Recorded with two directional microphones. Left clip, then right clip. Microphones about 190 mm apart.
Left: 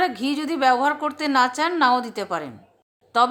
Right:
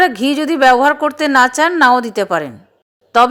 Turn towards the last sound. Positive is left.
turn(degrees=-30)  # may be behind; listen again after turning